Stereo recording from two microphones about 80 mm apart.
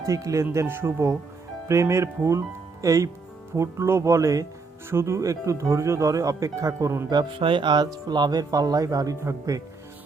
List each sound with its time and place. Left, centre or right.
0.0 s speech: right
0.5 s speech: right
7.1 s speech: right
8.0 s speech: right